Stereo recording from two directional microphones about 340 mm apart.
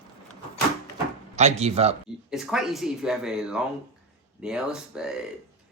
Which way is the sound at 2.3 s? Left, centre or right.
Centre.